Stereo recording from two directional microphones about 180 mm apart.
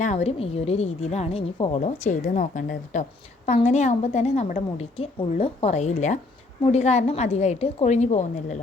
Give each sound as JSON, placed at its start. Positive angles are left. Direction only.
{"t": 0.0, "sound": "a woman's voice", "side_deg": 40}